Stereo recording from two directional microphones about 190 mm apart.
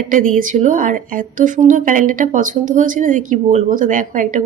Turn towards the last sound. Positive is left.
turn(degrees=-45)  # may be behind; listen again after turning